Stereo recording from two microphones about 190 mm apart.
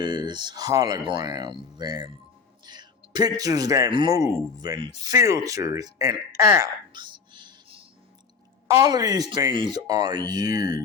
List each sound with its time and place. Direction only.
0.0 s speech: 20° right (ahead or behind)